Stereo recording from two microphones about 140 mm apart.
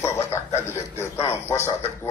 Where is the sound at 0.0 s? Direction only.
20° left (ahead or behind).